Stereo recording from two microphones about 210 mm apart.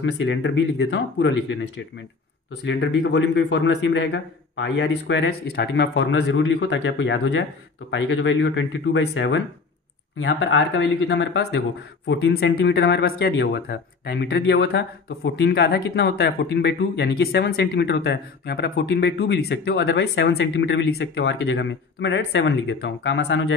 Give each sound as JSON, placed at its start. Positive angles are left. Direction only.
{"t": 0.0, "sound": "a man's voice", "side_deg": 60}
{"t": 13.3, "sound": "a man's voice", "side_deg": 65}
{"t": 13.7, "sound": "speech", "side_deg": 50}